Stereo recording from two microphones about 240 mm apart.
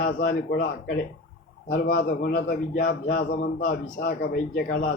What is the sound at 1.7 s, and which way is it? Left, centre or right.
A man's voice, left.